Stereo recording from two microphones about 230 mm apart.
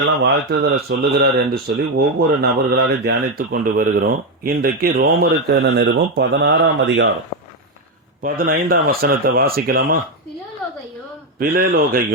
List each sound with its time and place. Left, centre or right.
0.2 s speech: right
8.2 s speech: right
11.3 s speech: right